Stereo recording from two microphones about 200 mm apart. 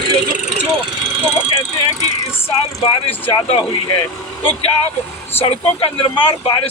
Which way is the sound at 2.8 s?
20° left (ahead or behind).